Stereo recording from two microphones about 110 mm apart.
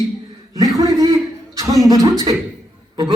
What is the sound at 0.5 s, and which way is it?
A man's voice, 30° right (ahead or behind).